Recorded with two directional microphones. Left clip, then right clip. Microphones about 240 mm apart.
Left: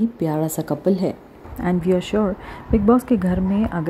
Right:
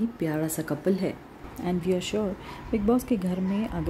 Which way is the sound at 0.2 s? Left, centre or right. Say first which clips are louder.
Left 5 dB; centre.